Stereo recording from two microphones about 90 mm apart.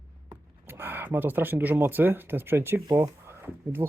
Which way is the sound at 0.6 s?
25° right (ahead or behind).